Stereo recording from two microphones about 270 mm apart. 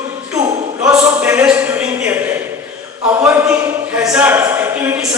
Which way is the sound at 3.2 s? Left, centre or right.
Centre.